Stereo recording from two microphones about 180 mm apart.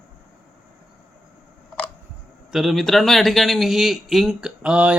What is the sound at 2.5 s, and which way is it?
Speech, centre (ahead or behind).